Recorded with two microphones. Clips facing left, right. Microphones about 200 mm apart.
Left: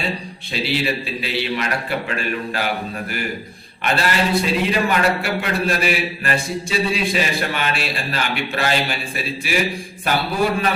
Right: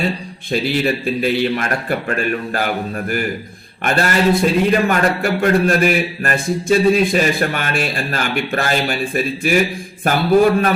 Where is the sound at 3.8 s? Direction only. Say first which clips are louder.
Right 5 dB; 45° right (ahead or behind).